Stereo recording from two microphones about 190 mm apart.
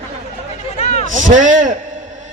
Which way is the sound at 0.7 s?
35° left (ahead or behind).